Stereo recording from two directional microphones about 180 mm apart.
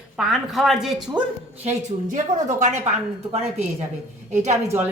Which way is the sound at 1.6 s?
45° right (ahead or behind).